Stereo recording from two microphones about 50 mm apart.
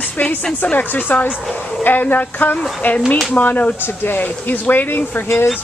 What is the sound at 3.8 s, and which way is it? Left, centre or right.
Speech, left.